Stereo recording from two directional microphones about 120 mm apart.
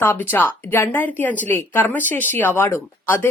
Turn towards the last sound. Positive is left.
turn(degrees=20)  # may be behind; listen again after turning